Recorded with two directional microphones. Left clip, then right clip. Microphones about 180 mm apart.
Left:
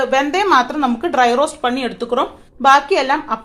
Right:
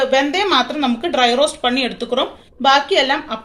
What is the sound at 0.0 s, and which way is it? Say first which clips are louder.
Speech: even; 45° left (ahead or behind).